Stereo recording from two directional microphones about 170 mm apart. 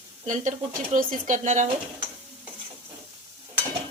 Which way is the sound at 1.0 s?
50° right (ahead or behind).